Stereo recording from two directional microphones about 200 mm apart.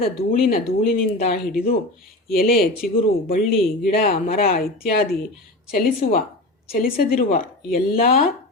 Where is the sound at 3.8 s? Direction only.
30° left (ahead or behind).